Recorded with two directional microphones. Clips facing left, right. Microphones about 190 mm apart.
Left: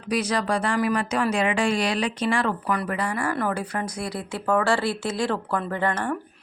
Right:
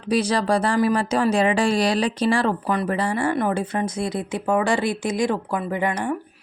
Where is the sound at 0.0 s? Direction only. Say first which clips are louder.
Right 4 dB; 30° right (ahead or behind).